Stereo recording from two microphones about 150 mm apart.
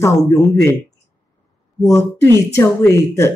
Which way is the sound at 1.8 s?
20° left (ahead or behind).